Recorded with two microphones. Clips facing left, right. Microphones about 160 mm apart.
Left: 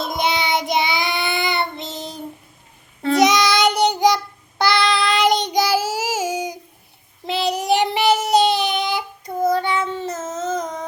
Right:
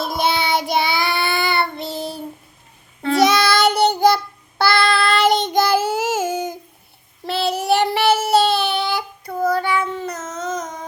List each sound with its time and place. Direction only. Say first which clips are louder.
0.0 s child singing: right 1 dB; 20° left (ahead or behind)